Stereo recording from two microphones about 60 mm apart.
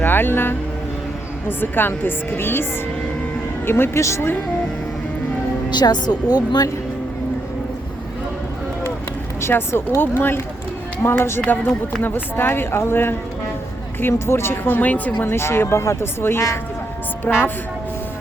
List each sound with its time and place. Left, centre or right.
0.0 s speech: left
3.7 s speech: left
4.0 s speech: left
5.8 s speech: left
9.4 s speech: left